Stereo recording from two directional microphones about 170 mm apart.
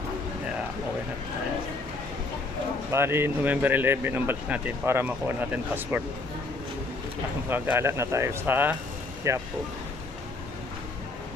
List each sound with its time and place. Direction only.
2.9 s speech: 15° right (ahead or behind)
7.5 s speech: 15° right (ahead or behind)